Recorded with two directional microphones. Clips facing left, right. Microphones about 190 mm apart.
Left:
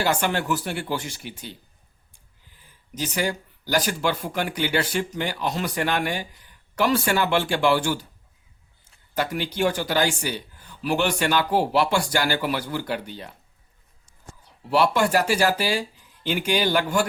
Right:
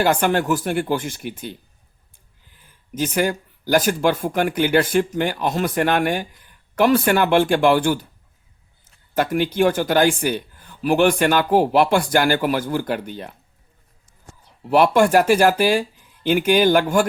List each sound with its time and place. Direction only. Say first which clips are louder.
0.0 s speech: right 6 dB; 50° right (ahead or behind)
2.9 s speech: right 6 dB; 50° right (ahead or behind)
9.1 s speech: right 7 dB; 50° right (ahead or behind)
14.7 s speech: right 5 dB; 50° right (ahead or behind)